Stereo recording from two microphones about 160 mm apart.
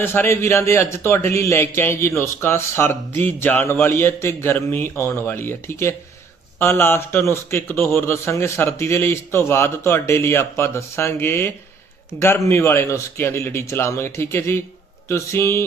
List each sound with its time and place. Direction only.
0.0 s a man's voice: 15° left (ahead or behind)